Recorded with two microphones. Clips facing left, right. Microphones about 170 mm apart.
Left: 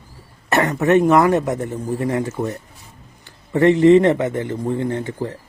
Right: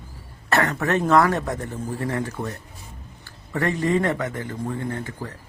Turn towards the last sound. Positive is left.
turn(degrees=25)  # may be behind; listen again after turning